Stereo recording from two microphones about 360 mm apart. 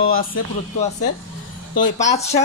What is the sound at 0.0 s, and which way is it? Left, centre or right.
Speech, left.